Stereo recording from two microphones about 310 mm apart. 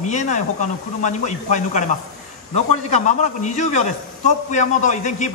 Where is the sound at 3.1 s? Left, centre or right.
Left.